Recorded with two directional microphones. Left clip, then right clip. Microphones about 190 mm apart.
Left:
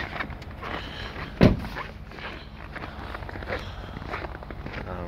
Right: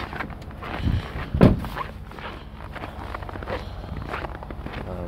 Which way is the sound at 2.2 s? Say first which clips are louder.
Right 1 dB; 10° right (ahead or behind).